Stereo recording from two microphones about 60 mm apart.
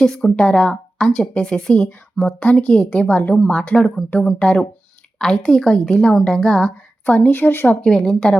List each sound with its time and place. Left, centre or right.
0.0 s a woman's voice: centre
7.3 s speech: left
7.8 s a woman's voice: centre